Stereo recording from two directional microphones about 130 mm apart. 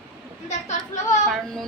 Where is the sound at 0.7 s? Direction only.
70° left (ahead or behind).